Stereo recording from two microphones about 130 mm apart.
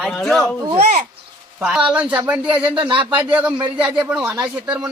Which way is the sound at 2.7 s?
40° right (ahead or behind).